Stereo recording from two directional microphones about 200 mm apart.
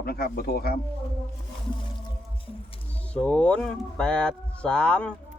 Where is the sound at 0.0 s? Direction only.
50° left (ahead or behind).